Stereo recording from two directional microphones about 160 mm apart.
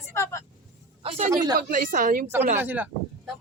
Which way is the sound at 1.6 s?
60° right (ahead or behind).